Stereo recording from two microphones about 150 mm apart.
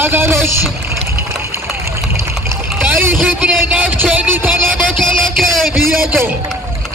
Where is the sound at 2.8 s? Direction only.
15° right (ahead or behind).